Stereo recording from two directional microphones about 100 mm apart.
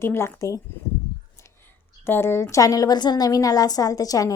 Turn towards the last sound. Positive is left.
turn(degrees=35)  # may be behind; listen again after turning